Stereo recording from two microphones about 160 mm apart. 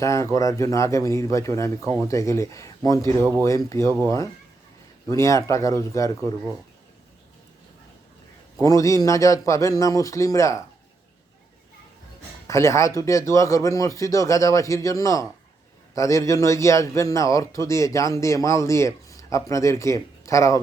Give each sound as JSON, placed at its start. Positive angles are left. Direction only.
{"t": 0.0, "sound": "a man's voice", "side_deg": 20}
{"t": 8.6, "sound": "a man's voice", "side_deg": 20}
{"t": 12.5, "sound": "a man's voice", "side_deg": 15}